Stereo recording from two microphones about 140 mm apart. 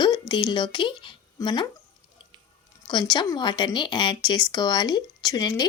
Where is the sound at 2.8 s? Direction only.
30° left (ahead or behind).